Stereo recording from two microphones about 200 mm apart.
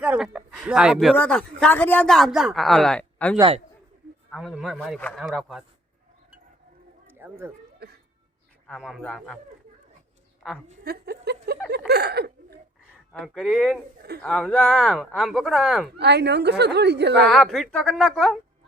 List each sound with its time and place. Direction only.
0.0 s speech: 5° right (ahead or behind)
7.1 s a sound: 10° right (ahead or behind)
7.8 s music: 50° right (ahead or behind)
8.6 s speech: centre (ahead or behind)
10.8 s speech: 55° right (ahead or behind)
11.9 s a sound: 55° right (ahead or behind)
13.1 s speech: centre (ahead or behind)
16.0 s a woman's voice: 55° right (ahead or behind)
17.2 s speech: centre (ahead or behind)